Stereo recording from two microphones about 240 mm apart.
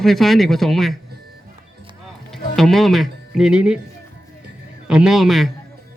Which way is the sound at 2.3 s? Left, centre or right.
Centre.